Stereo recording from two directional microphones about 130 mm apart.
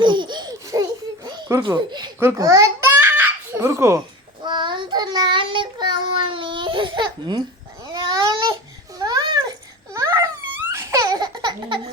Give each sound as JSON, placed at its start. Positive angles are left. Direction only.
{"t": 0.0, "sound": "baby laughter", "side_deg": -35}
{"t": 2.1, "sound": "a child's voice", "side_deg": -20}
{"t": 3.2, "sound": "a sound", "side_deg": -20}
{"t": 4.4, "sound": "child singing", "side_deg": -35}
{"t": 7.9, "sound": "babbling", "side_deg": -30}